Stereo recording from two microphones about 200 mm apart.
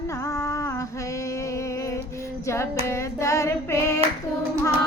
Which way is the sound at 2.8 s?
15° left (ahead or behind).